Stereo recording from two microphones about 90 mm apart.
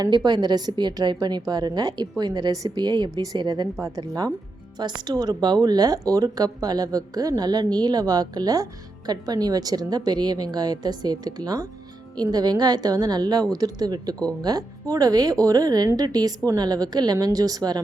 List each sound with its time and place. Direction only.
0.0 s speech: 50° right (ahead or behind)
3.8 s speech: 40° right (ahead or behind)
4.8 s speech: 55° right (ahead or behind)